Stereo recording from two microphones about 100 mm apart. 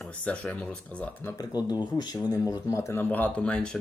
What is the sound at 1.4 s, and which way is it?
Speech, 40° left (ahead or behind).